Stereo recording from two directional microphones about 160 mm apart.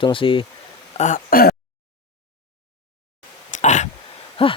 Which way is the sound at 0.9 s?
50° left (ahead or behind).